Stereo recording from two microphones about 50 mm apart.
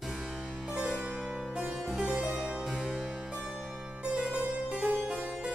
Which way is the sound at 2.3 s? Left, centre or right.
Centre.